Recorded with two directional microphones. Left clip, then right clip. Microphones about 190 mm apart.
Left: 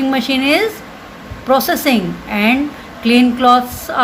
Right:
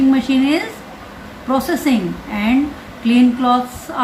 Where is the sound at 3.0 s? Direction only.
50° left (ahead or behind).